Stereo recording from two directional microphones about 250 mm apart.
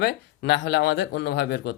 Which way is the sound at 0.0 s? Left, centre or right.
Left.